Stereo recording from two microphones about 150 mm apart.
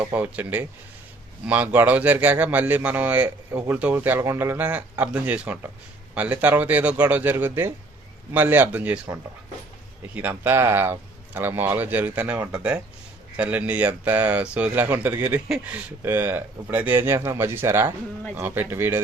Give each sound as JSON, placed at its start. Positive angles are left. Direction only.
{"t": 0.0, "sound": "a man's voice", "side_deg": -10}
{"t": 10.2, "sound": "a man's voice", "side_deg": -15}